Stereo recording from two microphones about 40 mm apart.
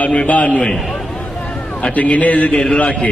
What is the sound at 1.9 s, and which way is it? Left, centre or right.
Speech, left.